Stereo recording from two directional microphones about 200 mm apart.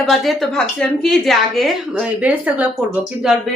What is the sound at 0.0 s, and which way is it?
A woman's voice, centre (ahead or behind).